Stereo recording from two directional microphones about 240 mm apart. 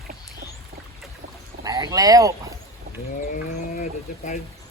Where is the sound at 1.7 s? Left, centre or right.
Centre.